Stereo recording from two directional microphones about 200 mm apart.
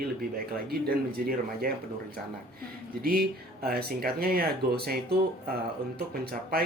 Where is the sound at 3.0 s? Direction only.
50° right (ahead or behind).